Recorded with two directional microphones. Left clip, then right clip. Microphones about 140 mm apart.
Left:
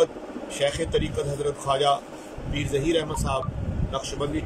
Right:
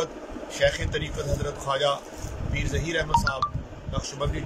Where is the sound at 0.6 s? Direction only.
20° left (ahead or behind).